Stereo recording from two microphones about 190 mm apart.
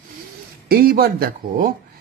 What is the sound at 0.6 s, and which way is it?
Speech, 50° right (ahead or behind).